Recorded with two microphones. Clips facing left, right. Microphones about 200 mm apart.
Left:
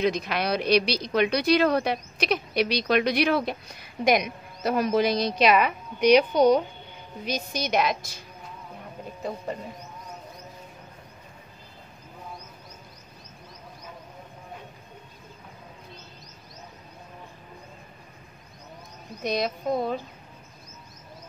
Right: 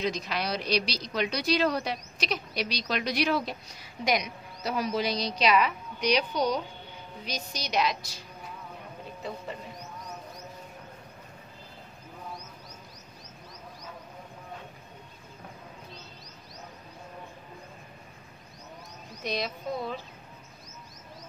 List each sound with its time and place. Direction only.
0.0 s a woman's voice: 60° left (ahead or behind)
19.2 s a woman's voice: 45° left (ahead or behind)